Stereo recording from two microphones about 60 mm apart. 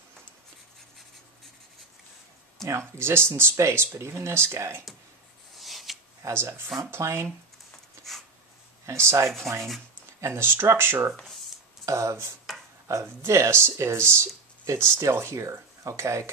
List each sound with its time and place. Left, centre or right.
3.0 s speech: right
3.5 s speech: right
5.6 s a sound: centre
6.2 s speech: right
8.8 s speech: right
10.4 s speech: right
11.8 s speech: right
12.9 s speech: right
13.3 s speech: right